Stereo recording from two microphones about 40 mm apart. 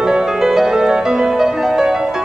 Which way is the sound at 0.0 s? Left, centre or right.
Centre.